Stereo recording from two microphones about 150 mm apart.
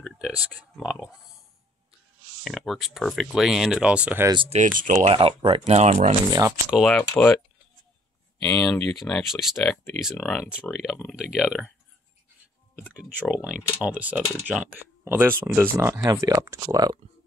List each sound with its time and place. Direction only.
0.0 s a sound: 5° right (ahead or behind)
0.5 s speech: 5° left (ahead or behind)
2.4 s speech: centre (ahead or behind)
4.5 s speech: 60° right (ahead or behind)
5.1 s speech: 35° right (ahead or behind)
5.7 s speech: 50° right (ahead or behind)
6.3 s speech: 20° right (ahead or behind)
6.7 s speech: centre (ahead or behind)
8.4 s speech: 5° left (ahead or behind)
13.5 s speech: 10° right (ahead or behind)